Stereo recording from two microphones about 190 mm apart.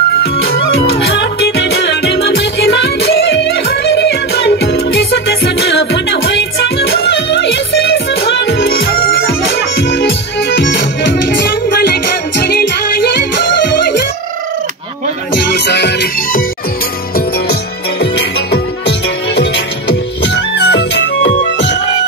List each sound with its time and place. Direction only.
1.0 s music: 65° left (ahead or behind)
15.5 s music: 60° left (ahead or behind)
18.1 s music: 60° left (ahead or behind)